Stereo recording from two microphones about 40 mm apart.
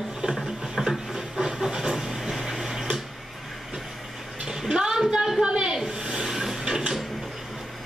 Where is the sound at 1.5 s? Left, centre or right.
Centre.